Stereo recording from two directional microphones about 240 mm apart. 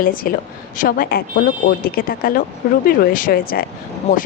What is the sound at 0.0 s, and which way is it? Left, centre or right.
Speech, left.